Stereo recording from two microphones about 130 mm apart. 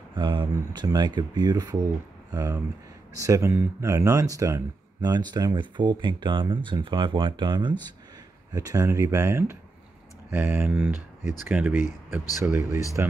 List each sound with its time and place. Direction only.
0.1 s speech: 35° right (ahead or behind); by 12.8 s 20° right (ahead or behind)